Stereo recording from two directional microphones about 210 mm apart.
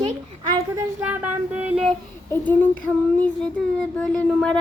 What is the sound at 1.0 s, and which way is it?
Speech, 5° right (ahead or behind).